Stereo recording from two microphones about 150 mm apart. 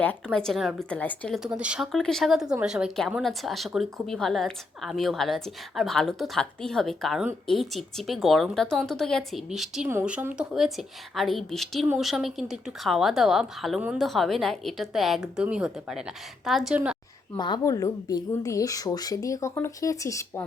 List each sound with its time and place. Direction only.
0.3 s a woman's voice: centre (ahead or behind)
1.4 s a woman's voice: 5° right (ahead or behind)
17.3 s speech: 30° left (ahead or behind)